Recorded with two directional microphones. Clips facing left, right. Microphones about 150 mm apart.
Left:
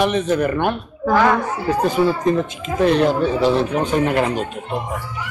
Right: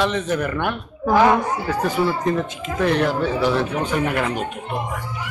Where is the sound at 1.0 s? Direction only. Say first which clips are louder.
Even; 15° right (ahead or behind).